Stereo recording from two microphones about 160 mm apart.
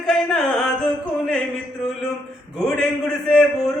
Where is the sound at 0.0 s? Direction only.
Centre (ahead or behind).